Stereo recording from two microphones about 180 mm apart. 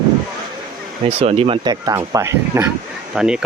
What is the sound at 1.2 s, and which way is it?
Speech, 30° right (ahead or behind).